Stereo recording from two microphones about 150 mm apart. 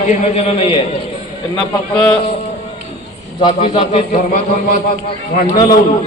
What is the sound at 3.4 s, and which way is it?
Speech, 35° left (ahead or behind).